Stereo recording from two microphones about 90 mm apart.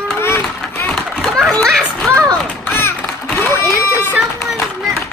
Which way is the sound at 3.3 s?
30° left (ahead or behind).